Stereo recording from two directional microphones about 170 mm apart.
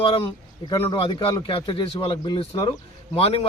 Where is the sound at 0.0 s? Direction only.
30° left (ahead or behind).